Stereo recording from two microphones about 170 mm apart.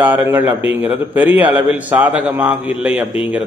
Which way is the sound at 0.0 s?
10° right (ahead or behind).